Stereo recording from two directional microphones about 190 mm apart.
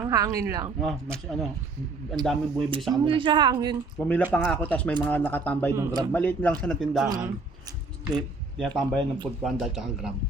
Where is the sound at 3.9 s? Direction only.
5° left (ahead or behind).